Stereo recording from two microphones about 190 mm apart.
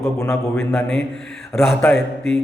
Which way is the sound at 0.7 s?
Centre (ahead or behind).